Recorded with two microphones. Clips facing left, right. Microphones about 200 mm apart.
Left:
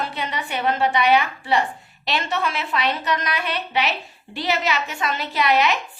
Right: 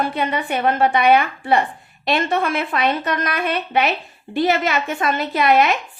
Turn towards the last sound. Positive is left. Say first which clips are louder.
# right 4 dB
turn(degrees=-50)  # may be behind; listen again after turning